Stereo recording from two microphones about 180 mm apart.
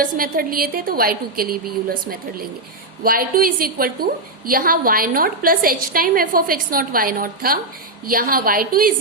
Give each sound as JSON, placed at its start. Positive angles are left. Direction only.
{"t": 0.0, "sound": "a woman's voice", "side_deg": -50}